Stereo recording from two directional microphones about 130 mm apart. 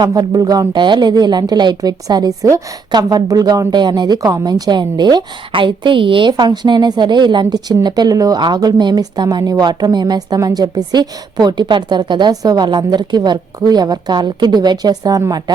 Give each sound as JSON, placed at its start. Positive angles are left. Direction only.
{"t": 0.0, "sound": "speech", "side_deg": -30}